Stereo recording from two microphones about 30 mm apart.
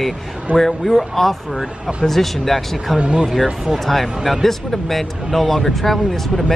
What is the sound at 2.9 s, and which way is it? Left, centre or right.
Speech, right.